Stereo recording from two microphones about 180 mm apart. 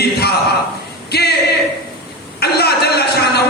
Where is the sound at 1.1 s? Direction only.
60° left (ahead or behind).